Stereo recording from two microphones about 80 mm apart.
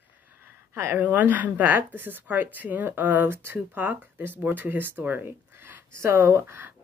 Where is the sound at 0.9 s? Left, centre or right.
Right.